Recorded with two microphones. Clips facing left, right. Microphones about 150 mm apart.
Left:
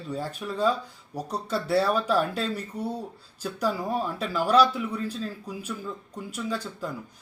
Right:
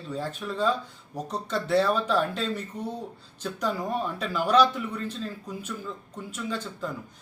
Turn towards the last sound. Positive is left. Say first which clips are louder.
# left 1 dB
turn(degrees=10)  # may be behind; listen again after turning